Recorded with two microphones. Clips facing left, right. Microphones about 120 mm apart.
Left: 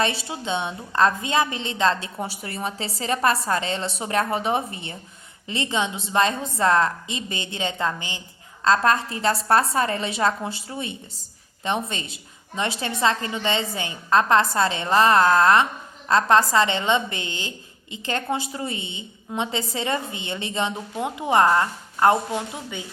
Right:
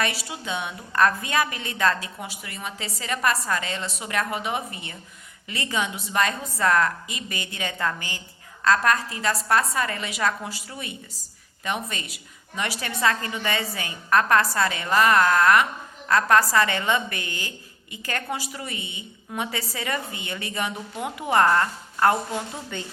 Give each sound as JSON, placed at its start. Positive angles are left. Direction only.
{"t": 0.0, "sound": "a woman's voice", "side_deg": 25}